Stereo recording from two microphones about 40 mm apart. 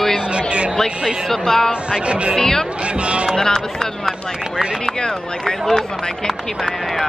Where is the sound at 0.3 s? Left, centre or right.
Right.